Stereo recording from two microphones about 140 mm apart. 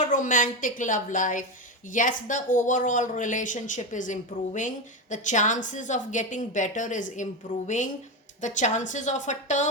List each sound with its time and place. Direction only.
0.0 s speech: 65° left (ahead or behind)
8.4 s speech: 60° left (ahead or behind)